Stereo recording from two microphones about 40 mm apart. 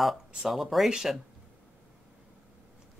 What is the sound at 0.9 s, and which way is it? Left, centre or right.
Speech, centre.